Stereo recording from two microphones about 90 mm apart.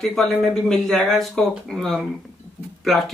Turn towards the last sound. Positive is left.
turn(degrees=0)  # may be behind; listen again after turning